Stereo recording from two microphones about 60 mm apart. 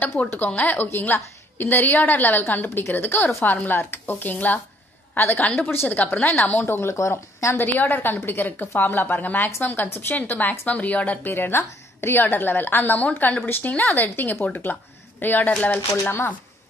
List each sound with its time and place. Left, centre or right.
0.2 s a woman's voice: left
7.0 s speech: left
7.5 s a woman's voice: left
11.2 s a woman's voice: left
13.5 s a woman's voice: left